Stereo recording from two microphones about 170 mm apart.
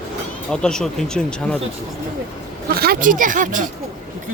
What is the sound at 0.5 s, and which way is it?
Speech, 5° left (ahead or behind).